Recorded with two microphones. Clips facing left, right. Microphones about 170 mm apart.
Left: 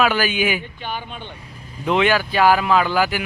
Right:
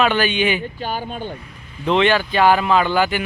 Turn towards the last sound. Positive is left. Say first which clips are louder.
# right 1 dB
turn(degrees=5)  # may be behind; listen again after turning